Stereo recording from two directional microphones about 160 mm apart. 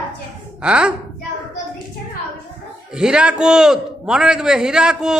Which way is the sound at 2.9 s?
5° right (ahead or behind).